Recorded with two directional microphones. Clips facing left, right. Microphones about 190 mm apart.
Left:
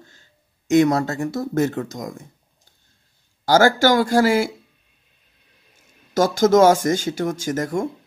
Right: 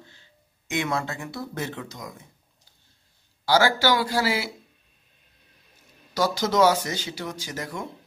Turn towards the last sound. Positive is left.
turn(degrees=45)  # may be behind; listen again after turning